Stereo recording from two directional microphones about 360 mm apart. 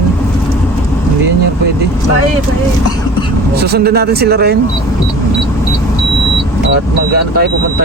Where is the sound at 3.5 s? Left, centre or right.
Right.